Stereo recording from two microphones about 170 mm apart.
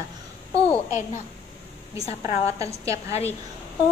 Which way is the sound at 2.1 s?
15° right (ahead or behind).